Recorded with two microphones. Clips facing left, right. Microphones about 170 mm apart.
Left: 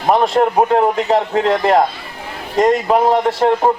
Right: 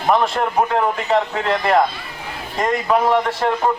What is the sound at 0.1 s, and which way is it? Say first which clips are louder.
A man's voice: left 4 dB; 35° left (ahead or behind).